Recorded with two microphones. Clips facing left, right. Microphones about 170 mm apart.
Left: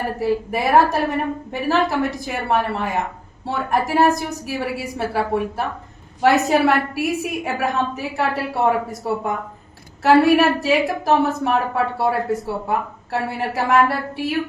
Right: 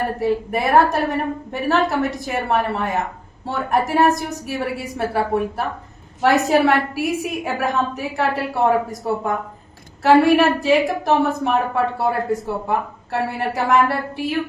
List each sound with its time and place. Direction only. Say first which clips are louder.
0.2 s a woman's voice: left 2 dB; centre (ahead or behind)